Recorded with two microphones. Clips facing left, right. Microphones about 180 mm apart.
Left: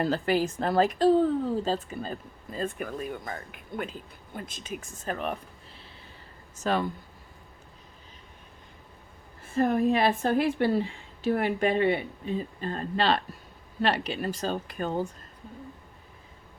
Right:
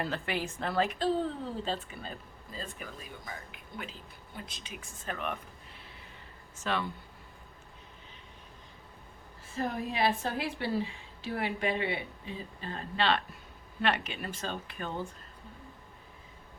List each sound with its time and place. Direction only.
0.0 s a woman's voice: 40° left (ahead or behind)
6.6 s speech: 40° left (ahead or behind)
9.6 s a woman's voice: 55° left (ahead or behind)
13.8 s speech: 35° left (ahead or behind)